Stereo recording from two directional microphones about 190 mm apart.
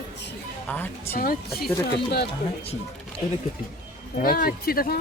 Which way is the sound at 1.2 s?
50° left (ahead or behind).